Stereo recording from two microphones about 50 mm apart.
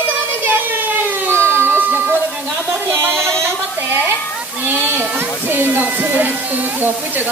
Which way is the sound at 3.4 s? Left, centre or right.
Right.